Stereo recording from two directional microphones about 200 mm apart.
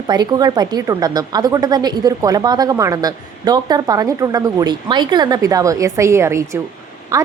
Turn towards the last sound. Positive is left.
turn(degrees=-15)  # may be behind; listen again after turning